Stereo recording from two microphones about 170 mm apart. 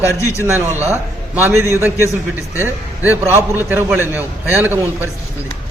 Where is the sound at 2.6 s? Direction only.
10° right (ahead or behind).